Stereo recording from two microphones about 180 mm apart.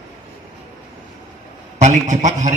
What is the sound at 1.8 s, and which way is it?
Speech, 40° right (ahead or behind).